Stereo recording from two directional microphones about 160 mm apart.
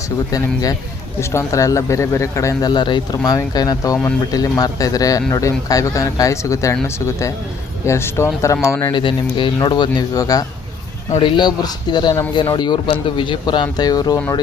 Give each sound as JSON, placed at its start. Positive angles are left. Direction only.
{"t": 0.3, "sound": "speech", "side_deg": 20}